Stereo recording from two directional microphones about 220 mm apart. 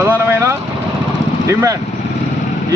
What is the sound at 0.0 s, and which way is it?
Vehicle, 10° right (ahead or behind).